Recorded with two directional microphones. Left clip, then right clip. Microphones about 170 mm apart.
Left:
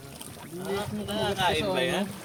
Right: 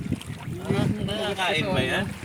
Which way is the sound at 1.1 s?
70° right (ahead or behind).